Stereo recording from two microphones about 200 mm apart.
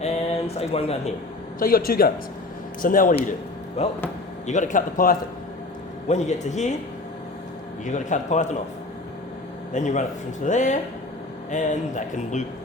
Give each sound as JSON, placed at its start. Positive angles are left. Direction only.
{"t": 0.0, "sound": "speech", "side_deg": 30}
{"t": 1.5, "sound": "speech", "side_deg": 45}
{"t": 7.9, "sound": "speech", "side_deg": 40}
{"t": 9.7, "sound": "speech", "side_deg": 35}